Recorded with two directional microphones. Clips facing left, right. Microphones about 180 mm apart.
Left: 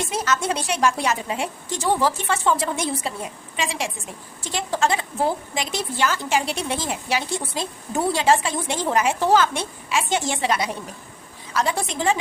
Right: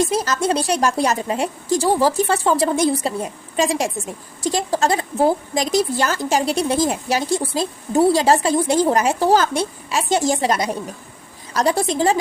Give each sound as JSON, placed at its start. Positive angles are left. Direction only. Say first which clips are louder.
{"t": 0.0, "sound": "a woman's voice", "louder": "right 5 dB", "side_deg": -35}